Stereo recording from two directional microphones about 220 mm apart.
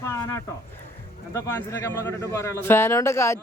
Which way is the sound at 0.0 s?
10° left (ahead or behind).